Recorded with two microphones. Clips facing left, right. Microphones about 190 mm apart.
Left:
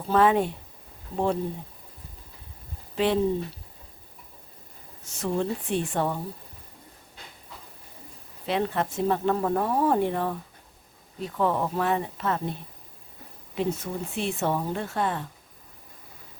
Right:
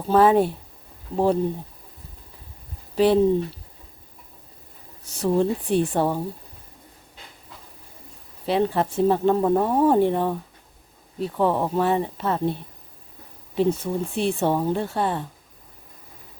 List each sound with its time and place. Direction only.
0.1 s speech: 35° right (ahead or behind)
2.9 s speech: 35° right (ahead or behind)
5.0 s speech: 35° right (ahead or behind)
8.4 s speech: 35° right (ahead or behind)
11.3 s speech: 30° right (ahead or behind)
13.6 s speech: 30° right (ahead or behind)